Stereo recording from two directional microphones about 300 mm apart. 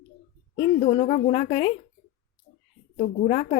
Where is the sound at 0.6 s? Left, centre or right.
Left.